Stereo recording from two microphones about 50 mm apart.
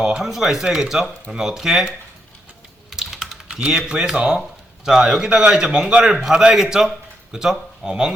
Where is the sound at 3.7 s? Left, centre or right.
Centre.